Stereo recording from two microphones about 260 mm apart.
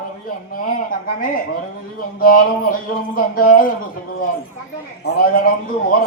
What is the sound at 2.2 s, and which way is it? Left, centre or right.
Speech, left.